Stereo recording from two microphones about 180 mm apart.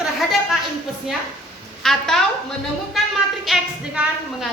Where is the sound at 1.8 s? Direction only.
Centre (ahead or behind).